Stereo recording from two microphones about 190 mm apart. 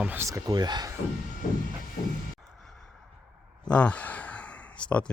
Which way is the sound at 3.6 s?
5° left (ahead or behind).